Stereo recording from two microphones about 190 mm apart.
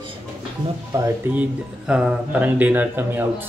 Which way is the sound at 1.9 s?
5° right (ahead or behind).